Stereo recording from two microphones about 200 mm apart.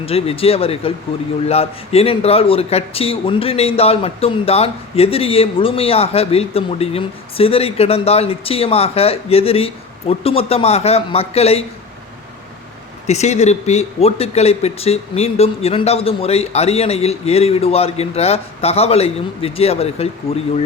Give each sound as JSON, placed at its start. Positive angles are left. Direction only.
{"t": 0.0, "sound": "a man's voice", "side_deg": 30}
{"t": 13.1, "sound": "speech", "side_deg": 35}